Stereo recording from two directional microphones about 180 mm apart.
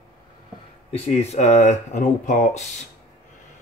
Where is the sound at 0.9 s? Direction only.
35° left (ahead or behind).